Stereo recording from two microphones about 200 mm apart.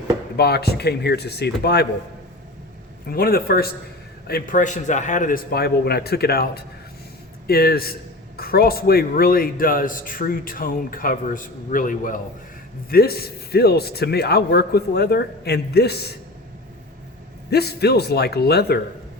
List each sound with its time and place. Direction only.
0.3 s a man's voice: 55° left (ahead or behind)
3.1 s a man's voice: 45° left (ahead or behind)
17.5 s a man's voice: 55° left (ahead or behind)